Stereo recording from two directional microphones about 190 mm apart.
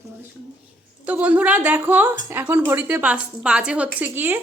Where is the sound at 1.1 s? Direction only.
5° right (ahead or behind).